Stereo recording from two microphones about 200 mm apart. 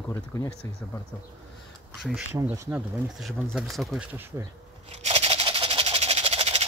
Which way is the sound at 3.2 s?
Centre (ahead or behind).